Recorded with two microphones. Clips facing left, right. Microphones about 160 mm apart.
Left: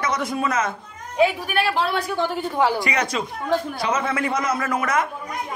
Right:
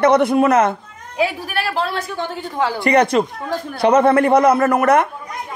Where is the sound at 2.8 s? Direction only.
60° right (ahead or behind).